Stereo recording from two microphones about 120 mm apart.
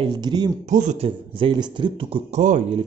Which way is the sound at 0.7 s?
90° right.